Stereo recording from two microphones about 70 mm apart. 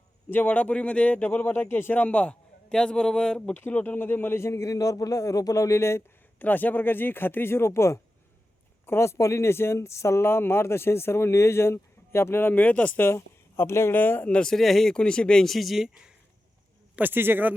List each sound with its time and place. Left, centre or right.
0.3 s a man's voice: left
3.5 s speech: left
6.4 s a man's voice: left
13.1 s speech: left
13.9 s a man's voice: left
14.3 s speech: centre
16.9 s speech: right